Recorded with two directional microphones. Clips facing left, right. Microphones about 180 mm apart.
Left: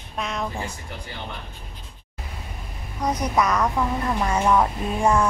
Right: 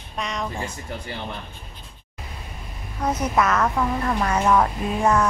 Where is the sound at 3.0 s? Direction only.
15° left (ahead or behind).